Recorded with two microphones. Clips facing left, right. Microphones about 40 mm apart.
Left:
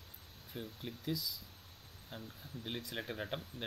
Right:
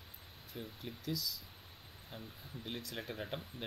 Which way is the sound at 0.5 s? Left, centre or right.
Centre.